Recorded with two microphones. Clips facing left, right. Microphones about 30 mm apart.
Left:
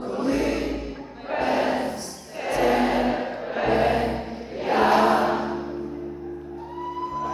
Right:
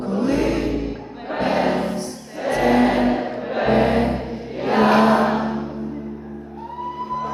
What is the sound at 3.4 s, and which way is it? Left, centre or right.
Music, right.